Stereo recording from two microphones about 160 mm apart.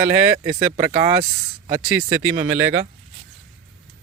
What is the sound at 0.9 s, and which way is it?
Speech, 30° right (ahead or behind).